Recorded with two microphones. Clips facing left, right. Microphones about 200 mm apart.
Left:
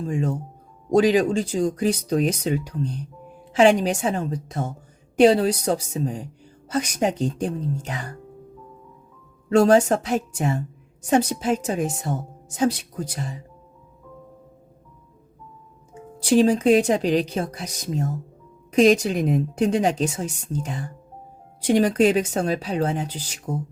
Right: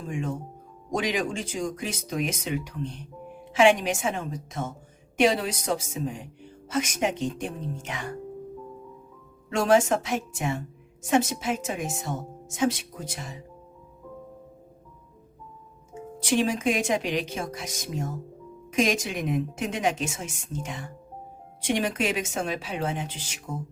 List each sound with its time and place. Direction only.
0.1 s a woman's voice: 35° left (ahead or behind)
9.5 s a woman's voice: 35° left (ahead or behind)
16.2 s a woman's voice: 35° left (ahead or behind)